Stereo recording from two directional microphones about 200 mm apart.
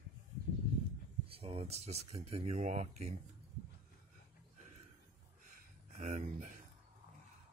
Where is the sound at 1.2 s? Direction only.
30° right (ahead or behind).